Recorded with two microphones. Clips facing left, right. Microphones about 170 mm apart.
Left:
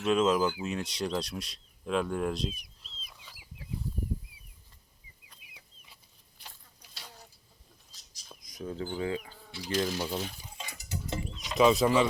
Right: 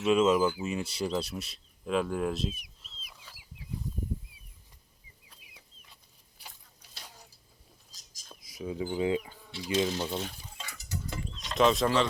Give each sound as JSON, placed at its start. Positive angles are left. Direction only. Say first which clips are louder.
{"t": 0.0, "sound": "speech", "louder": "right 2 dB", "side_deg": -5}
{"t": 6.4, "sound": "a sound", "louder": "right 1 dB", "side_deg": -10}
{"t": 8.3, "sound": "a sound", "louder": "right 2 dB", "side_deg": -5}
{"t": 10.1, "sound": "speech", "louder": "even", "side_deg": 0}
{"t": 10.6, "sound": "music", "louder": "even", "side_deg": 15}
{"t": 11.3, "sound": "speech", "louder": "left 2 dB", "side_deg": 0}